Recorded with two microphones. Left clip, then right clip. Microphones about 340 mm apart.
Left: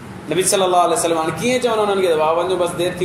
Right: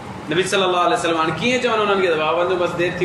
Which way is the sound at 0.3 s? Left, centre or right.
Centre.